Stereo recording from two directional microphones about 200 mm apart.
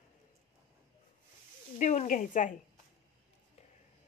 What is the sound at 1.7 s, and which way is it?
Speech, 40° left (ahead or behind).